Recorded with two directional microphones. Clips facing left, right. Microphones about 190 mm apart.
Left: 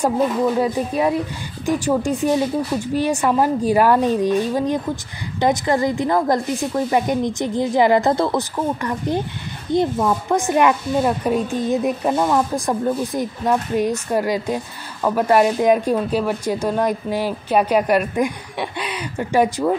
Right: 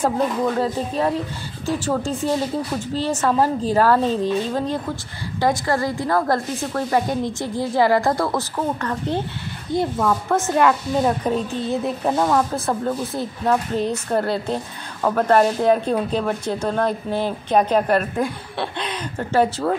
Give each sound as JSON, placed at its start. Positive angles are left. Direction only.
{"t": 0.0, "sound": "a woman's voice", "side_deg": 10}
{"t": 12.0, "sound": "speech", "side_deg": 5}